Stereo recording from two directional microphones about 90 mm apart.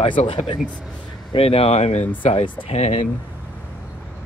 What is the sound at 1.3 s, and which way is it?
Speech, 90° left.